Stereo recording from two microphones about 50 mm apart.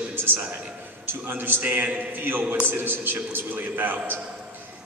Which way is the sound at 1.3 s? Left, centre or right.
Right.